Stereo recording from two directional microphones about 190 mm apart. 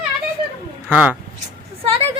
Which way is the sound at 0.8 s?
10° right (ahead or behind).